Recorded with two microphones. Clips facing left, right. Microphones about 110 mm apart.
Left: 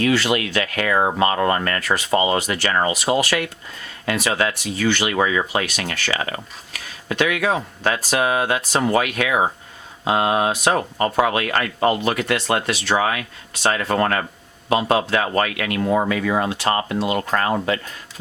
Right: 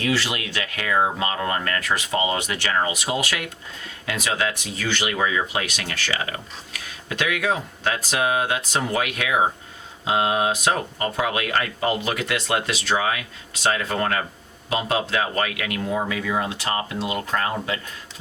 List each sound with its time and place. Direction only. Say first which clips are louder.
0.0 s speech: left 6 dB; 60° left (ahead or behind)
4.0 s speech: left 6 dB; 40° left (ahead or behind)
4.3 s speech: left 2 dB; 55° left (ahead or behind)